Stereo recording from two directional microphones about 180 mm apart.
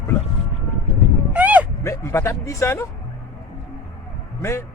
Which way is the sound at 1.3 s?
10° right (ahead or behind).